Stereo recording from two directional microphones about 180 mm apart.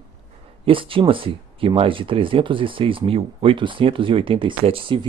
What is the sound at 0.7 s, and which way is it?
Speech, 30° right (ahead or behind).